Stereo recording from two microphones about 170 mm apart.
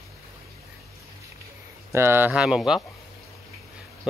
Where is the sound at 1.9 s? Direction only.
15° right (ahead or behind).